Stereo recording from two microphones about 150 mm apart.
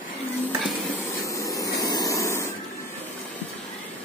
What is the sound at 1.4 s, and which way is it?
Vehicle, 20° left (ahead or behind).